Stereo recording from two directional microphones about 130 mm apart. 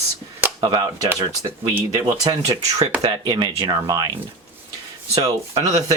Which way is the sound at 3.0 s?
30° right (ahead or behind).